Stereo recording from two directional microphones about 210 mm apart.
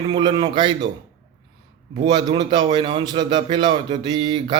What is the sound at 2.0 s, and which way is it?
A man's voice, 20° right (ahead or behind).